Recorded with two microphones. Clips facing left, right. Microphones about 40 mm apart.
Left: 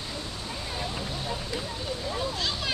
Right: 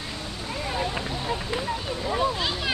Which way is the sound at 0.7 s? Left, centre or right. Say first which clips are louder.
Right 5 dB; right.